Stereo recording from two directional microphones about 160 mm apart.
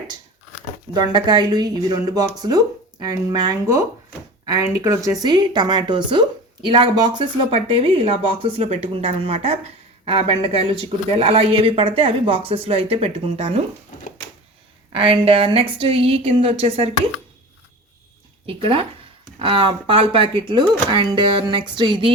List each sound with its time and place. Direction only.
0.9 s speech: 25° right (ahead or behind)
14.9 s speech: 35° right (ahead or behind)
18.4 s speech: 35° right (ahead or behind)